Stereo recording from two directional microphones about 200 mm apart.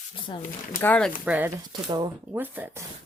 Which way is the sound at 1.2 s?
5° right (ahead or behind).